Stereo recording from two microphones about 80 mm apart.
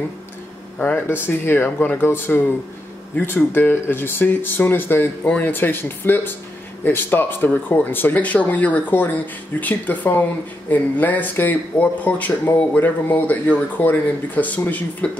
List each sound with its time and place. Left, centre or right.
0.7 s speech: left